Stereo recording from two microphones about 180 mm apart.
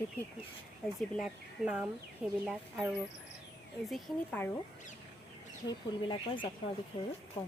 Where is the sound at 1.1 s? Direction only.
5° right (ahead or behind).